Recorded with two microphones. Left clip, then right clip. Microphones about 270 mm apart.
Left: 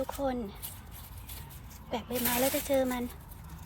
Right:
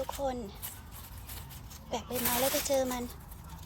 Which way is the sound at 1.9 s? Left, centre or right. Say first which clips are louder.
Left 1 dB; centre.